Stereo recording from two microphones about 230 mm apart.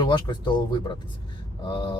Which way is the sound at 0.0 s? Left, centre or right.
Centre.